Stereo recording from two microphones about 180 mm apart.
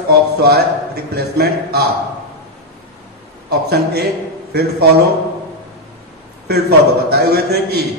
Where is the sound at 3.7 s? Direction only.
65° right (ahead or behind).